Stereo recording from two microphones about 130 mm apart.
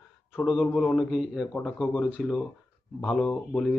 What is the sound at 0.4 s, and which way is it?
Speech, centre (ahead or behind).